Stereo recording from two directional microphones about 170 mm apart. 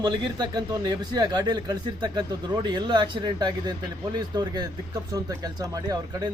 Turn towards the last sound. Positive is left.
turn(degrees=-20)  # may be behind; listen again after turning